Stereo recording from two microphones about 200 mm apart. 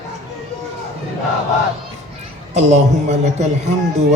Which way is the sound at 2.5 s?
35° right (ahead or behind).